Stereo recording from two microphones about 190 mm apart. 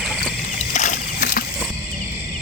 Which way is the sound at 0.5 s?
40° left (ahead or behind).